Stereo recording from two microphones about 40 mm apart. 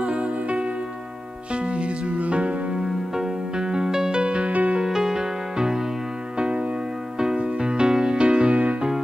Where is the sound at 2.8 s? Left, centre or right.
Centre.